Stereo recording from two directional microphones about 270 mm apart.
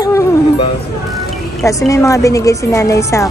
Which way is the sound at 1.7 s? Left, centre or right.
Centre.